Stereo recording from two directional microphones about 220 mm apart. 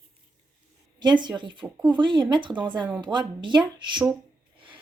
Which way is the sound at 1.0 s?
20° right (ahead or behind).